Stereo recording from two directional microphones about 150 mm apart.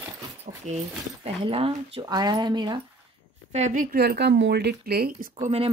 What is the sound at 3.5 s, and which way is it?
Speech, 55° right (ahead or behind).